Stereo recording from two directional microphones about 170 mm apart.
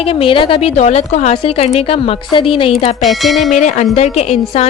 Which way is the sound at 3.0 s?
Centre (ahead or behind).